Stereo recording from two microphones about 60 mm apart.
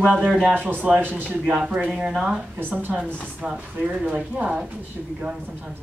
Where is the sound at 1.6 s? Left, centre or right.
Centre.